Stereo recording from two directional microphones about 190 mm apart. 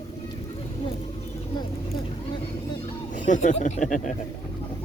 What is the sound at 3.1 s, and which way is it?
Speech, 40° left (ahead or behind).